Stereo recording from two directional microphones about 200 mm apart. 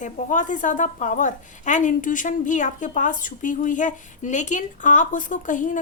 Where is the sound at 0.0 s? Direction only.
40° left (ahead or behind).